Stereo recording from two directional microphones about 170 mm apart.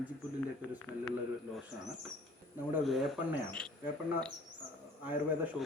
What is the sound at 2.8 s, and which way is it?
Speech, centre (ahead or behind).